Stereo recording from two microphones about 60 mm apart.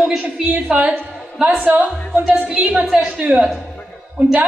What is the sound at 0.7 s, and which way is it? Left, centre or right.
Speech, right.